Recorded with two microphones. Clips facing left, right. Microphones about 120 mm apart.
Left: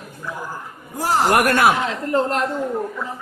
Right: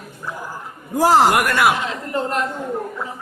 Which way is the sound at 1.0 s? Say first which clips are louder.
Right 6 dB; 85° right.